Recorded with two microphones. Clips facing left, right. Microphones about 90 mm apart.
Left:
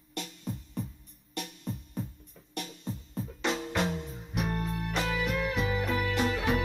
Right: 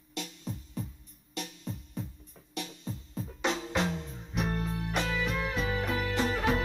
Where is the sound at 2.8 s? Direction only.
15° left (ahead or behind).